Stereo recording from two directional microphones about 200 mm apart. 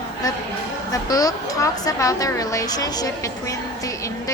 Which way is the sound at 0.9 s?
20° left (ahead or behind).